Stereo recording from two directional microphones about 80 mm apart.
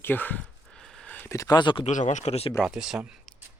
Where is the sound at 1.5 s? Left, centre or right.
Left.